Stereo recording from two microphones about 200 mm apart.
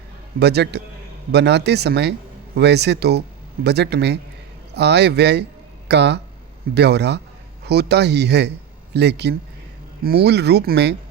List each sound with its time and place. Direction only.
0.3 s a man's voice: 55° right (ahead or behind)